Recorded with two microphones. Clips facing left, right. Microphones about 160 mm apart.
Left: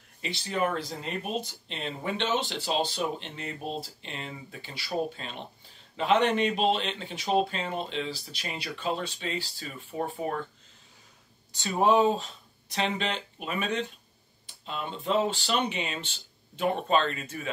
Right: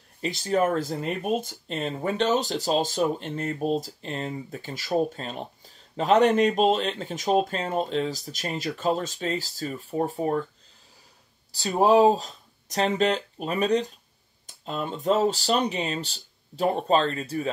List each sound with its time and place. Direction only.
0.2 s speech: 45° right (ahead or behind)
11.5 s speech: 35° right (ahead or behind)